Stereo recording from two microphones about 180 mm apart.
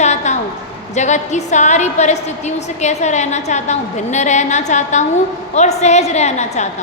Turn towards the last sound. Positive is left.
turn(degrees=40)  # may be behind; listen again after turning